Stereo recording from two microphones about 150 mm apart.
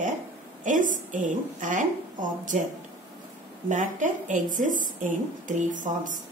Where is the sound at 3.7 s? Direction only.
60° right (ahead or behind).